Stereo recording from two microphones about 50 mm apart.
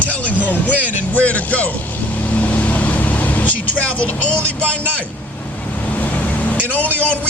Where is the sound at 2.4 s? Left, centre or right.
Left.